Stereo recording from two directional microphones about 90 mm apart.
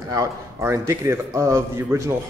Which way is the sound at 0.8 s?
35° right (ahead or behind).